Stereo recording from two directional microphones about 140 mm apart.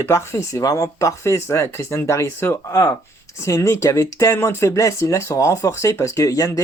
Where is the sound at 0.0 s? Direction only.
20° left (ahead or behind).